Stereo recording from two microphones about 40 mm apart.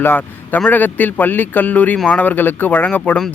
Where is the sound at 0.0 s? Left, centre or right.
Left.